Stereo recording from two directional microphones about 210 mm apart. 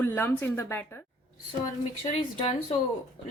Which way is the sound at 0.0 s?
10° left (ahead or behind).